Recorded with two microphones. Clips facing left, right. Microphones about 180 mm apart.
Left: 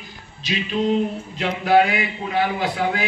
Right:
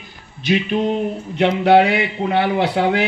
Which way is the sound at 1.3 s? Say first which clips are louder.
Right 4 dB; 70° right (ahead or behind).